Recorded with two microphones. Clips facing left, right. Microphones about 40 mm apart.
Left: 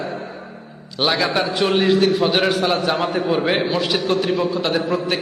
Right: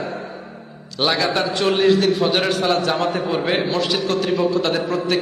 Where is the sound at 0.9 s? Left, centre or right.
Centre.